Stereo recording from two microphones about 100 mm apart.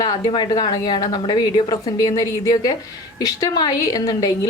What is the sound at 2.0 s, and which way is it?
A woman's voice, 35° left (ahead or behind).